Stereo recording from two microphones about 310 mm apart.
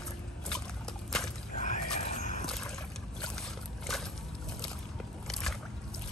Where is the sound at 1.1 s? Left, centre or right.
Centre.